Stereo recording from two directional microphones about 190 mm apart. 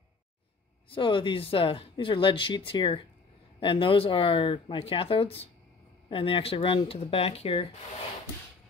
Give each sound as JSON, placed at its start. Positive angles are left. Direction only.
{"t": 0.8, "sound": "speech", "side_deg": 25}